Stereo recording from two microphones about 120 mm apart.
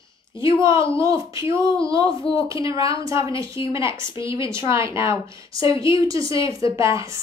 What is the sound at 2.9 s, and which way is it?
Speech, 25° right (ahead or behind).